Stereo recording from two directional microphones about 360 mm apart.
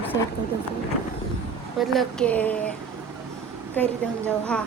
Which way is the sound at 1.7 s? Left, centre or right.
Centre.